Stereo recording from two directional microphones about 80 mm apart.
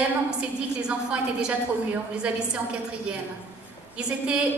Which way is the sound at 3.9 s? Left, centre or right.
Centre.